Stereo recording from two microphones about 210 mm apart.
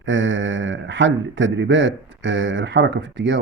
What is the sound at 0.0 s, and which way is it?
Speech, 65° right (ahead or behind).